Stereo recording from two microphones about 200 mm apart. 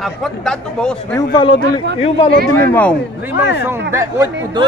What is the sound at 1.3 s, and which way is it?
A man's voice, 20° left (ahead or behind).